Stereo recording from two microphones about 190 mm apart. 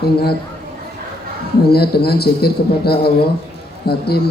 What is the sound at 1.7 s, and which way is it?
A man's voice, 55° left (ahead or behind).